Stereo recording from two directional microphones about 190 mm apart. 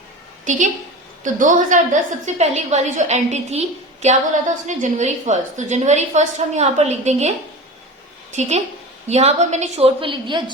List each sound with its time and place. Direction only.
0.5 s a woman's voice: 40° right (ahead or behind); by 10.4 s 25° right (ahead or behind)